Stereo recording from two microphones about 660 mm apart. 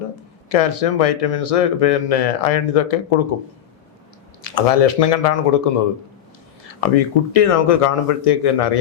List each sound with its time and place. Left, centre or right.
0.5 s speech: left
4.4 s speech: left